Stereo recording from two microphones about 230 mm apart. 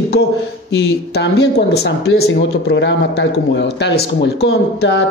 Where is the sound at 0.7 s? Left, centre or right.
Left.